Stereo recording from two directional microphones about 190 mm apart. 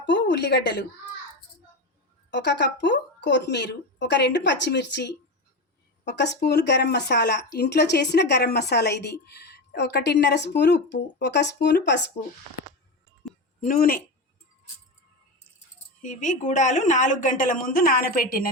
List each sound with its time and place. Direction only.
0.0 s speech: 65° left (ahead or behind)
2.3 s speech: 65° left (ahead or behind)
13.6 s speech: 50° left (ahead or behind)
15.5 s speech: 40° left (ahead or behind)